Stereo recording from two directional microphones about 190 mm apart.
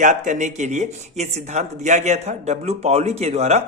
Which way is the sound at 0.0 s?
40° right (ahead or behind).